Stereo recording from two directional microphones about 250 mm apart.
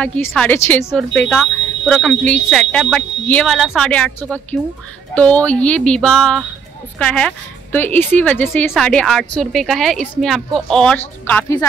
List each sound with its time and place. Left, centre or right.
0.0 s a woman's voice: centre